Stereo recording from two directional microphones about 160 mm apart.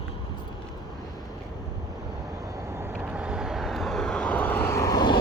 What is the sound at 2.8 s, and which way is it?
Vehicle, 10° right (ahead or behind).